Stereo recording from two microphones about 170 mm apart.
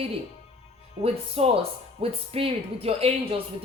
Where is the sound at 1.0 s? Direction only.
35° right (ahead or behind).